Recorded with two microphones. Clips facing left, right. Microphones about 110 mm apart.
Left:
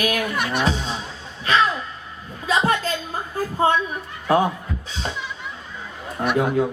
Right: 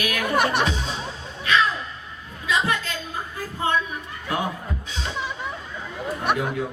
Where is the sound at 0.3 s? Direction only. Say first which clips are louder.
Right 3 dB; 55° right (ahead or behind).